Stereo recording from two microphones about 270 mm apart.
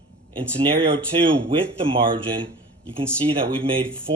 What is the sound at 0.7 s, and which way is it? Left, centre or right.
Speech, centre.